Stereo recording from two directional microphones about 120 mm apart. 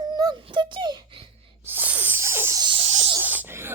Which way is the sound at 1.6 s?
15° right (ahead or behind).